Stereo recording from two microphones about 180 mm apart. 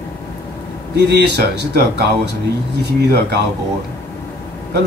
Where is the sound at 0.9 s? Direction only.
65° right (ahead or behind).